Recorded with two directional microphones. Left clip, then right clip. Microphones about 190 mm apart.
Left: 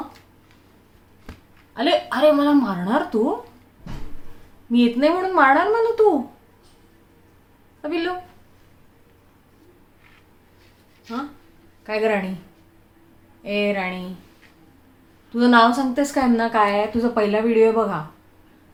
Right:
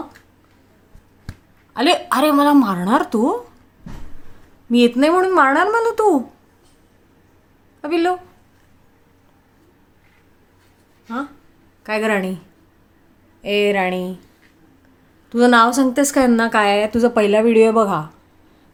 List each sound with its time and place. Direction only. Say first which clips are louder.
1.7 s a woman's voice: right 4 dB; 60° right (ahead or behind)
4.7 s a woman's voice: right 4 dB; 60° right (ahead or behind)
7.8 s speech: right 6 dB; 60° right (ahead or behind)
11.8 s speech: right 2 dB; 60° right (ahead or behind)
13.4 s a woman's voice: right 6 dB; 65° right (ahead or behind)
15.3 s a woman's voice: right 3 dB; 60° right (ahead or behind)